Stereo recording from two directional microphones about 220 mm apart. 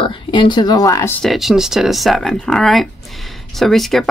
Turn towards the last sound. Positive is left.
turn(degrees=0)  # may be behind; listen again after turning